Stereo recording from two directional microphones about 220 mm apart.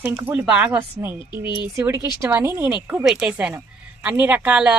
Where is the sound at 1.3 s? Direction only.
20° left (ahead or behind).